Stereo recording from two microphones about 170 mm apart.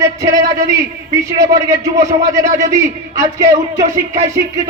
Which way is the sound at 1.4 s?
20° right (ahead or behind).